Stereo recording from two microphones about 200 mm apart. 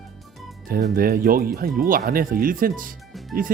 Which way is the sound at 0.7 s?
45° right (ahead or behind).